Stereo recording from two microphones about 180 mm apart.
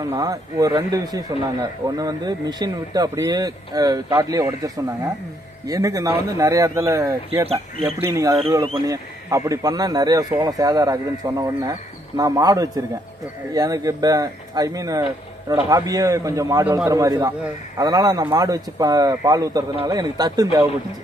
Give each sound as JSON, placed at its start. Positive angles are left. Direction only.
{"t": 0.0, "sound": "a man's voice", "side_deg": -20}
{"t": 7.4, "sound": "speech", "side_deg": -30}
{"t": 8.0, "sound": "a man's voice", "side_deg": -15}